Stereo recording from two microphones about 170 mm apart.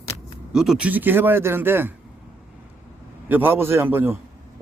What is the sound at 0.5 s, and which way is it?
A man's voice, 5° right (ahead or behind).